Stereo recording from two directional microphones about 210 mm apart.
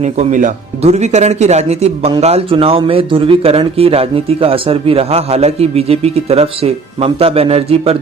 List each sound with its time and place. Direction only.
0.0 s speech: 35° right (ahead or behind)